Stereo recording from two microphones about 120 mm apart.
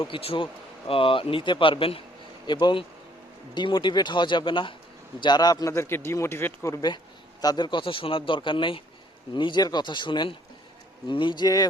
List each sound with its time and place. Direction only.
0.0 s a man's voice: 45° left (ahead or behind); by 6.7 s 20° left (ahead or behind)
7.4 s speech: 40° left (ahead or behind)